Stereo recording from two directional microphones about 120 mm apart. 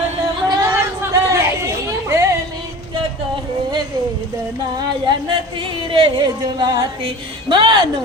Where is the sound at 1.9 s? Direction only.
25° right (ahead or behind).